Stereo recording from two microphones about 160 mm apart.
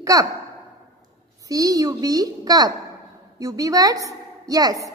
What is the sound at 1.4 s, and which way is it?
A woman's voice, 20° right (ahead or behind).